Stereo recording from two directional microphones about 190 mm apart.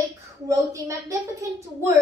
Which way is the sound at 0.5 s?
15° right (ahead or behind).